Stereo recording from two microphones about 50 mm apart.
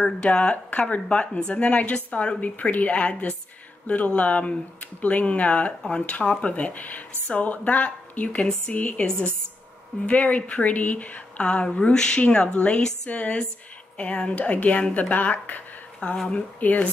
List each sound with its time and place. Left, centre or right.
0.0 s a woman's voice: left
11.4 s a woman's voice: centre
16.0 s a woman's voice: left
16.3 s speech: left